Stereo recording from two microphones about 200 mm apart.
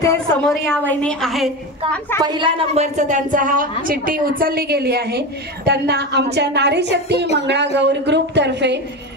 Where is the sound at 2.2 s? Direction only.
25° right (ahead or behind).